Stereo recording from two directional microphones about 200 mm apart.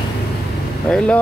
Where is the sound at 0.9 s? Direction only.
5° left (ahead or behind).